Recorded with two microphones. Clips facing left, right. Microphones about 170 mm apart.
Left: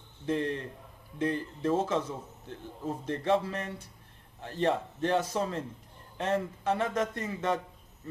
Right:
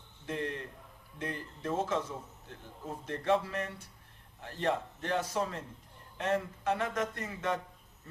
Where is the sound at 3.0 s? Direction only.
30° left (ahead or behind).